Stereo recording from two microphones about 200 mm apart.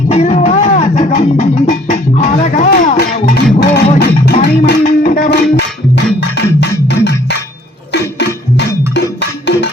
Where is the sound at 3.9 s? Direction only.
55° left (ahead or behind).